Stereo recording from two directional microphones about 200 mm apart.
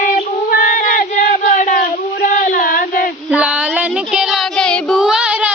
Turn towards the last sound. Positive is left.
turn(degrees=-5)  # may be behind; listen again after turning